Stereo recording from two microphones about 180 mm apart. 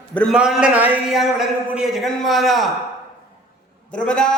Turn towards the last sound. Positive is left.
turn(degrees=5)  # may be behind; listen again after turning